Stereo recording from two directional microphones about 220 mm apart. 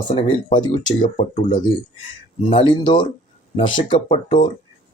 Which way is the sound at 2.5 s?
20° left (ahead or behind).